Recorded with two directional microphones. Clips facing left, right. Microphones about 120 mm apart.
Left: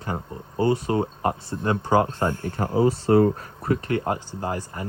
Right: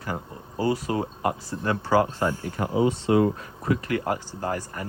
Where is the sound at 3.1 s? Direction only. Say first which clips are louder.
Left 3 dB; 40° left (ahead or behind); by 4.9 s 20° left (ahead or behind).